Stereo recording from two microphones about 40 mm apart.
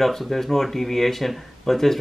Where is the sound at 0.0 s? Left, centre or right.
Centre.